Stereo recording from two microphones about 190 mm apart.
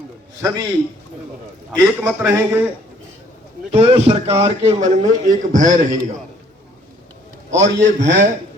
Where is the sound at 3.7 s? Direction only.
30° right (ahead or behind).